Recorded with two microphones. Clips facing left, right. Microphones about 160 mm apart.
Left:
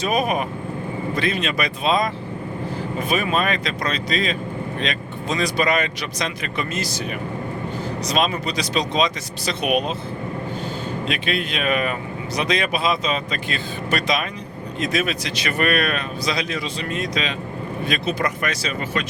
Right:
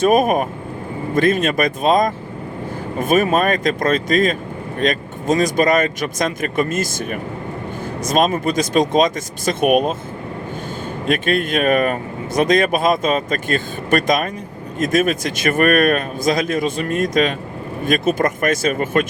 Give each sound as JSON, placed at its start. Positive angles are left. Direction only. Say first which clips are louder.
{"t": 0.0, "sound": "speech", "louder": "right 7 dB", "side_deg": -50}
{"t": 11.1, "sound": "speech", "louder": "right 9 dB", "side_deg": -45}